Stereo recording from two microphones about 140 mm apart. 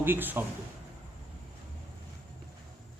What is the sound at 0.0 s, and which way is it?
Speech, 15° right (ahead or behind).